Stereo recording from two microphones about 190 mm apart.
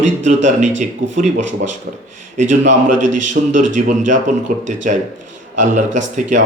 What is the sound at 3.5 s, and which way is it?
Speech, 40° right (ahead or behind).